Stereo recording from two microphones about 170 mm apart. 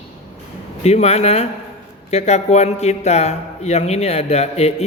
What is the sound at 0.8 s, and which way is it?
Speech, 40° left (ahead or behind).